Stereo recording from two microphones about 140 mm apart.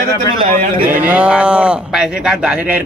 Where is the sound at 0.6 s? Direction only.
85° right.